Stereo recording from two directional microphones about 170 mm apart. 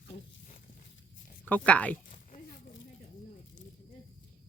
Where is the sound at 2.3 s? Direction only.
55° left (ahead or behind).